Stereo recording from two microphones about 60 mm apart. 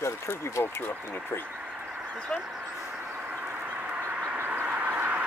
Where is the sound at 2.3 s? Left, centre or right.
Centre.